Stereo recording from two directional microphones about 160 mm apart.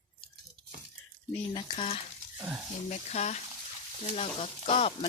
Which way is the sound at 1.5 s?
35° left (ahead or behind).